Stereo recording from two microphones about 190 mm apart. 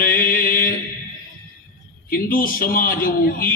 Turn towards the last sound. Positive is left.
turn(degrees=50)  # may be behind; listen again after turning